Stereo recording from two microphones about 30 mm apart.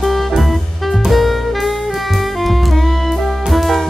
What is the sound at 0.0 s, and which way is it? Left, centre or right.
Saxophone, centre.